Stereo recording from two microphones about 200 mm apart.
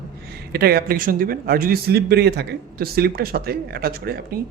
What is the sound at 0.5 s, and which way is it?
Speech, 50° right (ahead or behind).